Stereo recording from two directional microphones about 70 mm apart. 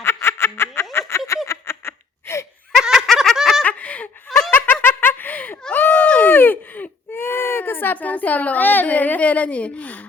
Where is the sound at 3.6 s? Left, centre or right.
Left.